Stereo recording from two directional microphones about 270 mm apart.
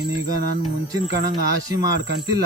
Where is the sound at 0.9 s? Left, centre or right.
Centre.